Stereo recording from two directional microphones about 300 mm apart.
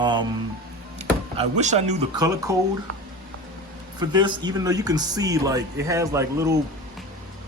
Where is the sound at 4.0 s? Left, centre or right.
Centre.